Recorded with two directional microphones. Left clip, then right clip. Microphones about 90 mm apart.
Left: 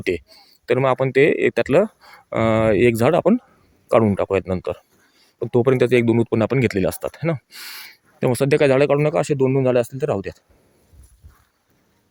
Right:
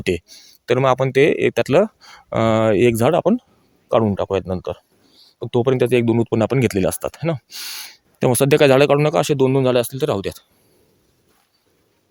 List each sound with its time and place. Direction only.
0.0 s speech: 20° right (ahead or behind); by 1.9 s 5° right (ahead or behind)
2.0 s speech: 15° right (ahead or behind); by 3.2 s centre (ahead or behind)
3.8 s speech: 20° left (ahead or behind)
5.1 s a sound: 25° left (ahead or behind)
5.7 s speech: 10° left (ahead or behind)
6.2 s speech: 5° right (ahead or behind)
7.2 s speech: centre (ahead or behind); by 9.1 s 30° right (ahead or behind)
9.1 s speech: 15° right (ahead or behind)
9.4 s speech: 5° right (ahead or behind)